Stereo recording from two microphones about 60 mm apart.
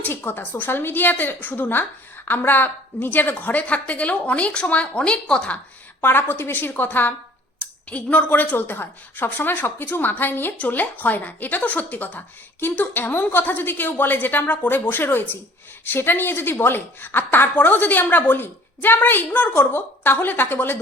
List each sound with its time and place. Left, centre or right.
0.0 s a woman's voice: left; by 5.5 s centre
6.0 s a woman's voice: left
7.9 s a woman's voice: left